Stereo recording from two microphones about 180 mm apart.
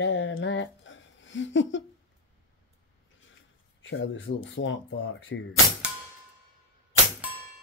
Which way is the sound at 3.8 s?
90° left.